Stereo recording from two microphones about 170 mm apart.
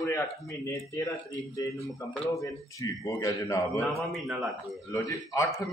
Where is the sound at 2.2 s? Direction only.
20° left (ahead or behind).